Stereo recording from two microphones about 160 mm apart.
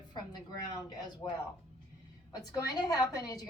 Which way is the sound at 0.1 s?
25° left (ahead or behind).